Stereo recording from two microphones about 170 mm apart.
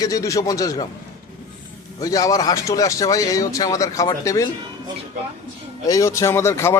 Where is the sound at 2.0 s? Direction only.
20° left (ahead or behind).